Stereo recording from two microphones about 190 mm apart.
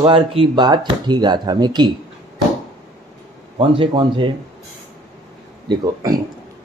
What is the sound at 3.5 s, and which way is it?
Speech, 25° right (ahead or behind).